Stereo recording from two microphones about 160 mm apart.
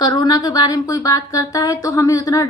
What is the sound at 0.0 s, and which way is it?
A woman's voice, 25° left (ahead or behind).